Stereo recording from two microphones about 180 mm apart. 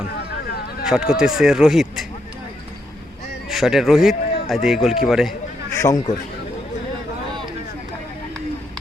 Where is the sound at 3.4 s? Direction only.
Centre (ahead or behind).